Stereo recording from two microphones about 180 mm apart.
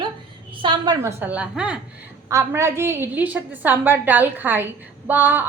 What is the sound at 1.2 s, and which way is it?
A woman's voice, 5° right (ahead or behind).